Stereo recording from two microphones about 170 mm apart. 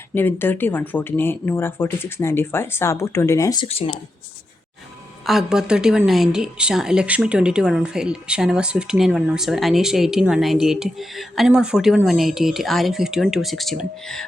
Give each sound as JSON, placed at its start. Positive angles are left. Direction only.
{"t": 0.1, "sound": "speech", "side_deg": 10}
{"t": 3.7, "sound": "speech", "side_deg": 35}
{"t": 5.2, "sound": "a woman's voice", "side_deg": 0}